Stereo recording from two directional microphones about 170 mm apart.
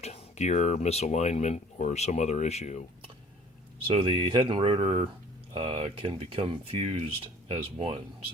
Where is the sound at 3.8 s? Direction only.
30° right (ahead or behind).